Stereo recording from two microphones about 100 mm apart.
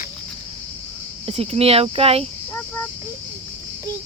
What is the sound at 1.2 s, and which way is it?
Speech, 90° right.